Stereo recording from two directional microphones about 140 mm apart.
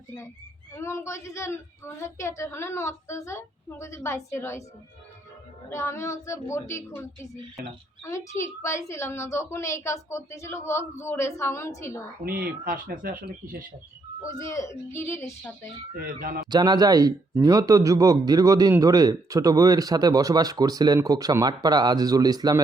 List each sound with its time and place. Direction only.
0.7 s a woman's voice: 20° left (ahead or behind)
5.7 s a woman's voice: 20° left (ahead or behind)
7.6 s speech: 90° right
8.4 s a woman's voice: 20° left (ahead or behind)
12.2 s speech: 90° right
14.3 s a woman's voice: 20° left (ahead or behind)
16.0 s speech: 90° right
16.5 s speech: 30° right (ahead or behind)